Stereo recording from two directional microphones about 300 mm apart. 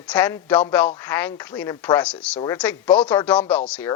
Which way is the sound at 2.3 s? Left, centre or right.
Centre.